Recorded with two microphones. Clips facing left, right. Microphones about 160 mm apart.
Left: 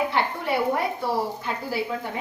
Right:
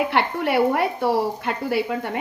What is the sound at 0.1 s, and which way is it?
A woman's voice, 70° right (ahead or behind).